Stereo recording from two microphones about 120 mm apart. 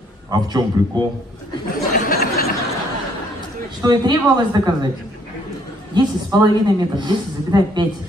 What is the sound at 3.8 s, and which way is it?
A man's voice, 35° right (ahead or behind).